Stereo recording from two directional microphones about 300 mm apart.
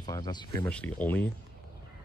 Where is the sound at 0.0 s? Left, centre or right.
Centre.